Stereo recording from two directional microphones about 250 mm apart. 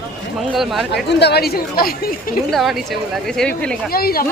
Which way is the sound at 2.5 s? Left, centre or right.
Centre.